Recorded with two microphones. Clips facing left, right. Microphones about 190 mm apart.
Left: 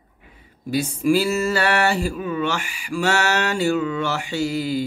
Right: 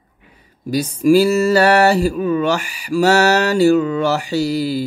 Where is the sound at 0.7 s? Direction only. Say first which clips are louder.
Right 6 dB; 40° right (ahead or behind).